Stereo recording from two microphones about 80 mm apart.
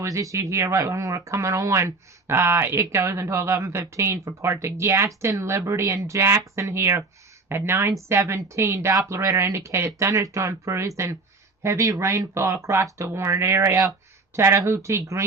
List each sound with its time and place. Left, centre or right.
0.0 s speech: right